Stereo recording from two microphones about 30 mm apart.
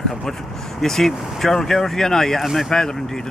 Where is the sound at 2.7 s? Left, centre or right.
Centre.